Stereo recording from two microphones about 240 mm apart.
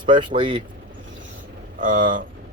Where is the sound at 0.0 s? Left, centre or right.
Centre.